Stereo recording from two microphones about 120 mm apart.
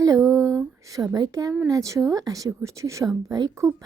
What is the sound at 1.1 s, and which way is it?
A woman's voice, 30° right (ahead or behind).